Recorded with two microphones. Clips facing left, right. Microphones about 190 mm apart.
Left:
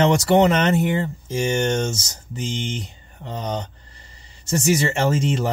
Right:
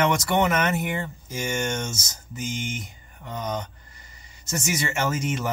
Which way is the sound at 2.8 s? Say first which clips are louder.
Left 5 dB; 30° left (ahead or behind).